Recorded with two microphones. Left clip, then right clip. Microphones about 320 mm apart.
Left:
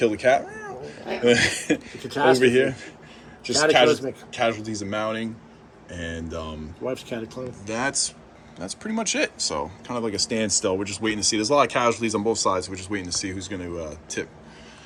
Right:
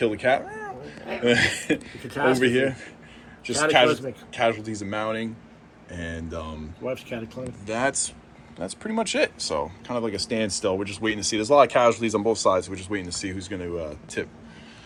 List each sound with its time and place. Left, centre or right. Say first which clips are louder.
0.0 s cat: left 2 dB; centre
1.2 s speech: left 2 dB; centre
6.8 s speech: left 1 dB; left
7.7 s speech: right 1 dB; centre